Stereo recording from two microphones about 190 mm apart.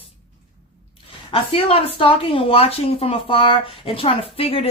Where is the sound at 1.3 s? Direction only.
30° left (ahead or behind).